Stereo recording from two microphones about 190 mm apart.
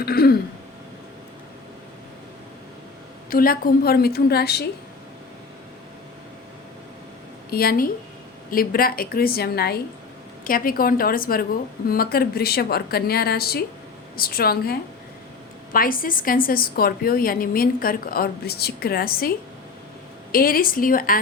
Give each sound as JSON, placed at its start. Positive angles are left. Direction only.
{"t": 0.0, "sound": "throat clearing", "side_deg": 55}
{"t": 3.2, "sound": "a woman's voice", "side_deg": 50}
{"t": 7.5, "sound": "a woman's voice", "side_deg": 50}
{"t": 20.3, "sound": "a woman's voice", "side_deg": 50}